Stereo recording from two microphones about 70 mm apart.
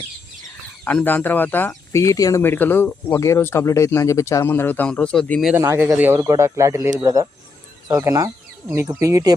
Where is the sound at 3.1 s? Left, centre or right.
Left.